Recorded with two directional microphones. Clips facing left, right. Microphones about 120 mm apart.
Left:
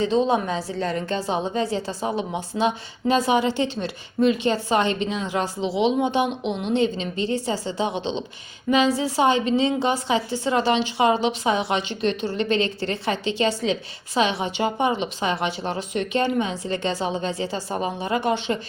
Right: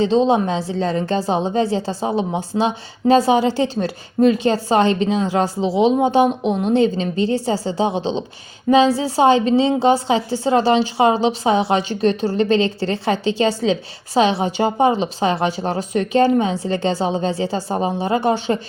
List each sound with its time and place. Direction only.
0.0 s a woman's voice: 30° right (ahead or behind)